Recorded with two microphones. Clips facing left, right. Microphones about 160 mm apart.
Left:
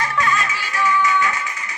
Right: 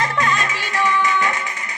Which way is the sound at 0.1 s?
35° right (ahead or behind).